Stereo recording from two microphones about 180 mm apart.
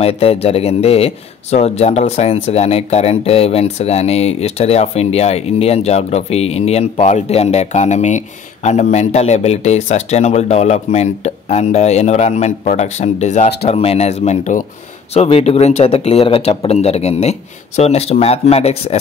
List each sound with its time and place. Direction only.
0.0 s speech: 35° left (ahead or behind)